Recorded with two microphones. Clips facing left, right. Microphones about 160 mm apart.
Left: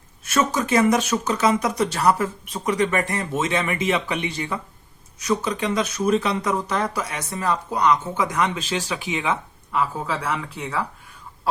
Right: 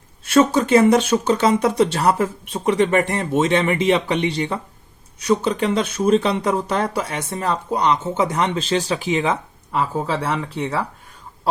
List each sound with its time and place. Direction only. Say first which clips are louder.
0.3 s speech: right 7 dB; 30° right (ahead or behind)